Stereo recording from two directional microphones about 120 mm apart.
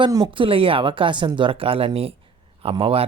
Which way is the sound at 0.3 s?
45° right (ahead or behind).